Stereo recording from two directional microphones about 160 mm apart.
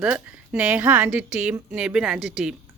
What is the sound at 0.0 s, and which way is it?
A woman's voice, 10° right (ahead or behind).